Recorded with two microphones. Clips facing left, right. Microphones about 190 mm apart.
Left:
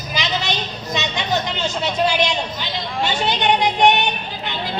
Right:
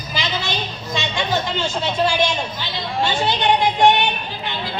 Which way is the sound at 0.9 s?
20° left (ahead or behind).